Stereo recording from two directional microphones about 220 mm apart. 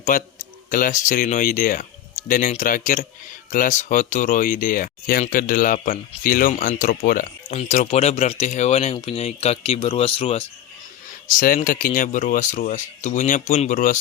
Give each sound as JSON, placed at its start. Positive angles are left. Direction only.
{"t": 0.1, "sound": "speech", "side_deg": 40}
{"t": 11.3, "sound": "speech", "side_deg": 40}